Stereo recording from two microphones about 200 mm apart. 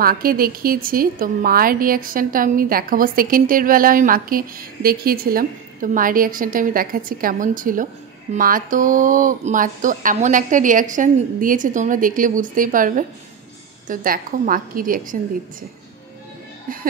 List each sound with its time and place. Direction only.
0.0 s a woman's voice: 45° right (ahead or behind)